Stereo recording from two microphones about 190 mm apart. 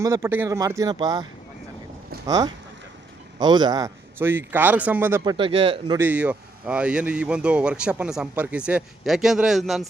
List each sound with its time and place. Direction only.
0.0 s a man's voice: 15° right (ahead or behind)
5.2 s speech: 25° right (ahead or behind)
6.0 s speech: 10° right (ahead or behind)